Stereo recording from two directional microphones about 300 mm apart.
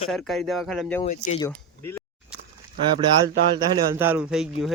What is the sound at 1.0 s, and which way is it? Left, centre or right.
Speech, left.